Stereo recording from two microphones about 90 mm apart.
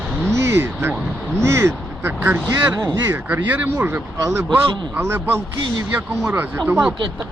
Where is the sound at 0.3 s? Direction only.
30° right (ahead or behind).